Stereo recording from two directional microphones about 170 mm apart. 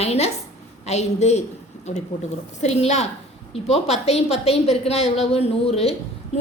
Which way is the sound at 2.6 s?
40° left (ahead or behind).